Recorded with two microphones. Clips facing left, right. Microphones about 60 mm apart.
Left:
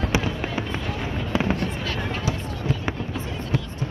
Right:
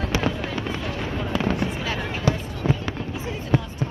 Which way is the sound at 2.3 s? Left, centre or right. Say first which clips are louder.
Right 9 dB; right.